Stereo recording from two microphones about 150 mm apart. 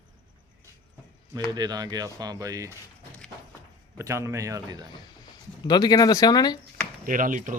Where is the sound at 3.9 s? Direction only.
20° right (ahead or behind).